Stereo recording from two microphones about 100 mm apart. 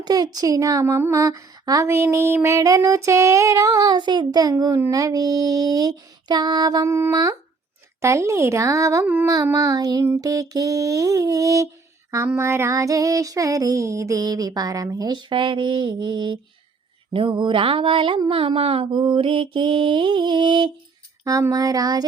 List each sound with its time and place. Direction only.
0.0 s speech: 40° right (ahead or behind)
8.0 s speech: 30° right (ahead or behind)
15.3 s mantra: 55° right (ahead or behind)
21.2 s speech: 35° right (ahead or behind)